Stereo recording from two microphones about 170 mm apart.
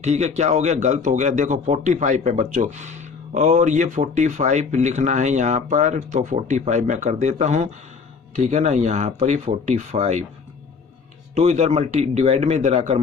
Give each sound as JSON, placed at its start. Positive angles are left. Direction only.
{"t": 0.0, "sound": "speech", "side_deg": -40}
{"t": 11.3, "sound": "a man's voice", "side_deg": -40}